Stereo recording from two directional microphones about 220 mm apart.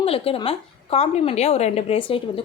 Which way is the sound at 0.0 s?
25° left (ahead or behind).